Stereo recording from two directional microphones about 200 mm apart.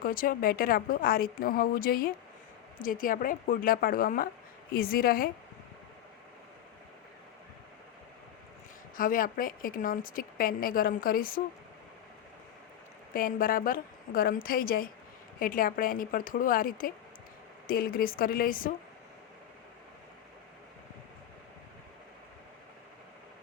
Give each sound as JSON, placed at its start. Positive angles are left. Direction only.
{"t": 0.0, "sound": "speech", "side_deg": 45}
{"t": 9.0, "sound": "speech", "side_deg": 45}
{"t": 13.1, "sound": "speech", "side_deg": 45}